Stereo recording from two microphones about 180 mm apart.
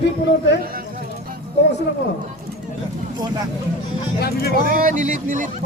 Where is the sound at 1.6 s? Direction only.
70° left (ahead or behind).